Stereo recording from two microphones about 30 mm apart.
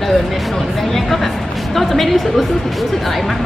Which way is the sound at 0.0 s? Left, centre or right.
Centre.